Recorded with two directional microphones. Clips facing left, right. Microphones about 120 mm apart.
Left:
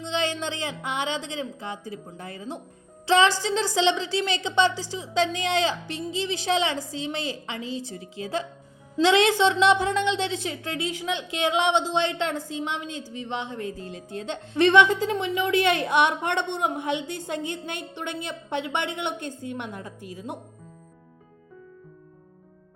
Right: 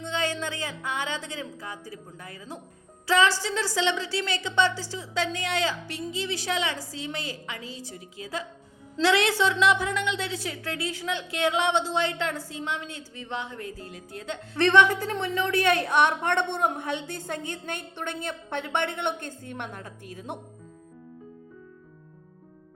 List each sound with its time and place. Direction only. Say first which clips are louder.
0.0 s a woman's voice: left 2 dB; 20° left (ahead or behind)
17.1 s a woman's voice: left 3 dB; 45° right (ahead or behind)